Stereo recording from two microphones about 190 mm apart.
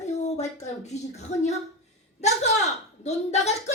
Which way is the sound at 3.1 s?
35° left (ahead or behind).